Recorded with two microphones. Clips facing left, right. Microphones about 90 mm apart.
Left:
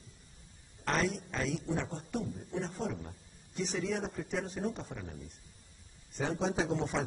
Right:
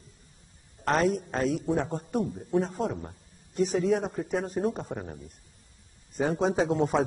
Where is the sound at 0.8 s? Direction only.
45° right (ahead or behind).